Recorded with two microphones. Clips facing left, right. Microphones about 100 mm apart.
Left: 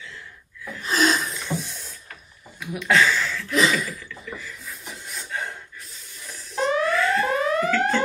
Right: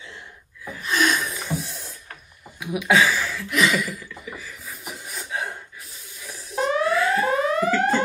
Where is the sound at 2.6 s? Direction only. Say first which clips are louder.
Right 1 dB; 10° right (ahead or behind).